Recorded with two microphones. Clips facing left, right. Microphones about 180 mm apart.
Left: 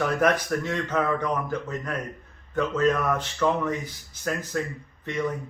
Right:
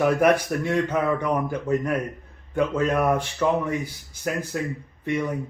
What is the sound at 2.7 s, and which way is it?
Speech, 10° right (ahead or behind).